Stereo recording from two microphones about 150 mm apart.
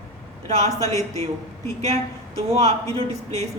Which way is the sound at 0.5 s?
45° right (ahead or behind).